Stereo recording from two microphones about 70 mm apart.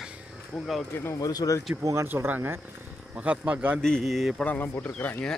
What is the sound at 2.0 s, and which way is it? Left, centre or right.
Speech, right.